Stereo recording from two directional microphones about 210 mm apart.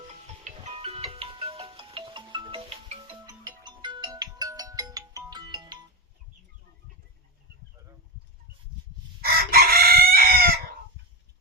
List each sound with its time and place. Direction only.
0.4 s music: 30° right (ahead or behind)
3.4 s ringtone: 20° right (ahead or behind)
9.2 s chicken: 45° right (ahead or behind)